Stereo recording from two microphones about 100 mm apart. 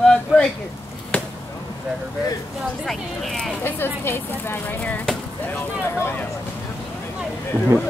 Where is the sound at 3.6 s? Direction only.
20° left (ahead or behind).